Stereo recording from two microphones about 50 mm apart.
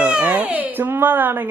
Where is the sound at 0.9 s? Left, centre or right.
Right.